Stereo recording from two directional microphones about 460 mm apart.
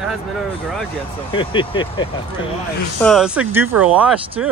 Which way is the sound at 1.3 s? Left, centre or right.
Centre.